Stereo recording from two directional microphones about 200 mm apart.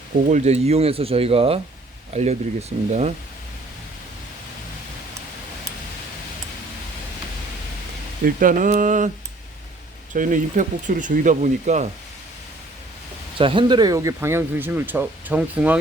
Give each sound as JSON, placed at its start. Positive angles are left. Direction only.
{"t": 0.3, "sound": "speech", "side_deg": -35}
{"t": 8.2, "sound": "speech", "side_deg": -45}
{"t": 10.1, "sound": "speech", "side_deg": -40}
{"t": 13.4, "sound": "speech", "side_deg": -25}